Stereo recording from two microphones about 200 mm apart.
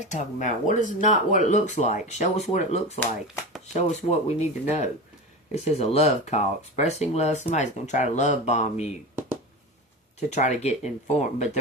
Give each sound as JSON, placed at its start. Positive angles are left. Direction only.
{"t": 0.0, "sound": "speech", "side_deg": 40}
{"t": 10.2, "sound": "speech", "side_deg": 35}